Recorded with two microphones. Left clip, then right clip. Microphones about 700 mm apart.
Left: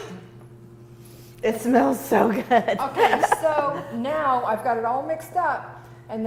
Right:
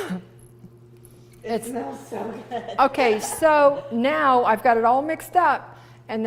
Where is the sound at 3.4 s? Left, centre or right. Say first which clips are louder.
Right 6 dB; right.